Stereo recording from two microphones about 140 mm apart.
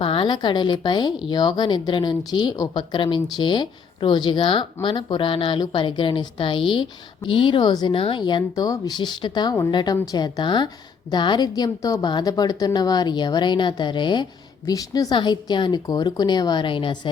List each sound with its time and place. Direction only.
0.0 s speech: 40° left (ahead or behind)